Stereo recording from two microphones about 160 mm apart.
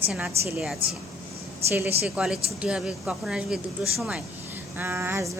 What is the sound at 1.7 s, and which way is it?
Speech, 15° right (ahead or behind).